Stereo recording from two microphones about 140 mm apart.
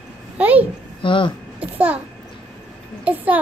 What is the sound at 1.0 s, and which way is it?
Speech, 35° left (ahead or behind).